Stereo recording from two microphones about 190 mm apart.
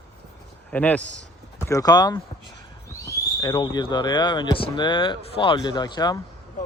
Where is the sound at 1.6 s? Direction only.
15° left (ahead or behind).